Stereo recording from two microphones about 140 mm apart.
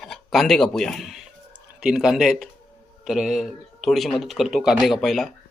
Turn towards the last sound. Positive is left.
turn(degrees=0)  # may be behind; listen again after turning